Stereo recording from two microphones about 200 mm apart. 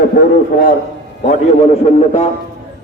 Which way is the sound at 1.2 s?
35° left (ahead or behind).